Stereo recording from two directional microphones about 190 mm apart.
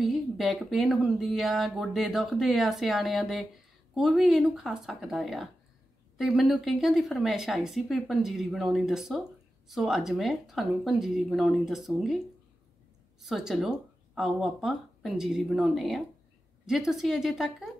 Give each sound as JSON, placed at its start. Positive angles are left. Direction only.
{"t": 0.0, "sound": "speech", "side_deg": 0}
{"t": 13.2, "sound": "speech", "side_deg": 0}